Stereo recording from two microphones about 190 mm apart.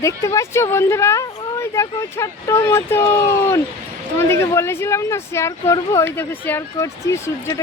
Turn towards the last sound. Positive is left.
turn(degrees=15)  # may be behind; listen again after turning